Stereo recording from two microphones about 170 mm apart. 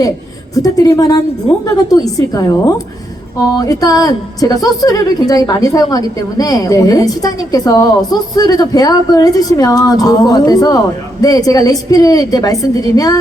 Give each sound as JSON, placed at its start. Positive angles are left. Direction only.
{"t": 0.5, "sound": "a woman's voice", "side_deg": 20}